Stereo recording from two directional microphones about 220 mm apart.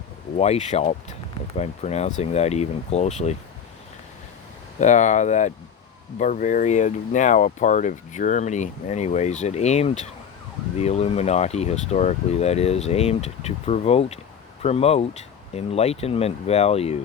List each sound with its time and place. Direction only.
0.3 s speech: 30° left (ahead or behind)
4.8 s speech: 35° left (ahead or behind)